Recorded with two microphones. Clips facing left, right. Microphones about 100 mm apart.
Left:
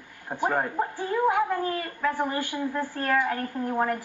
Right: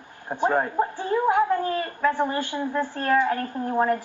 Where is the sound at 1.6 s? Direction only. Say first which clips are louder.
Right 3 dB; 30° right (ahead or behind).